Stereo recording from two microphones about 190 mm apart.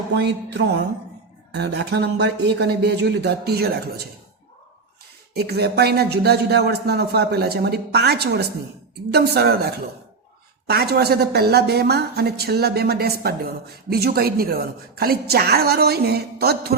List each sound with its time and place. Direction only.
0.1 s speech: 65° right (ahead or behind)
5.3 s speech: 55° right (ahead or behind)